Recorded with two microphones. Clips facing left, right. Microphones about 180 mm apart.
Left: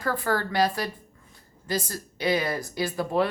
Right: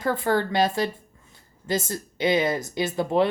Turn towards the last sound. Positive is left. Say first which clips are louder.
# right 3 dB
turn(degrees=-25)  # may be behind; listen again after turning